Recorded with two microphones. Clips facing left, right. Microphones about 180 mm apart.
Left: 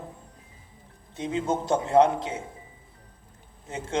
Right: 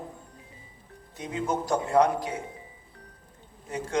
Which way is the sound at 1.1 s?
25° left (ahead or behind).